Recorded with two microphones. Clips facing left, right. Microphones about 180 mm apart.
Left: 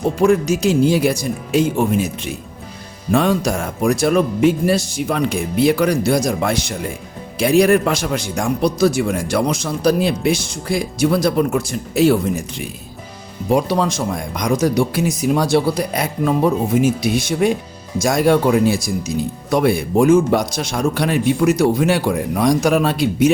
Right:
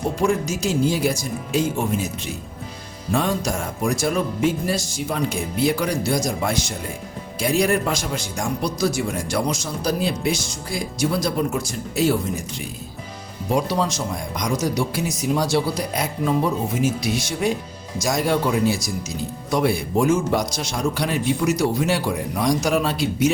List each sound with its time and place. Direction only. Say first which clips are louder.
0.2 s speech: left 8 dB; 60° left (ahead or behind)
3.1 s speech: left 6 dB; 65° left (ahead or behind)
13.5 s speech: left 5 dB; 60° left (ahead or behind)